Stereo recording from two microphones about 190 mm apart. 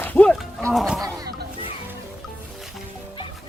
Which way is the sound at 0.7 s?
Centre (ahead or behind).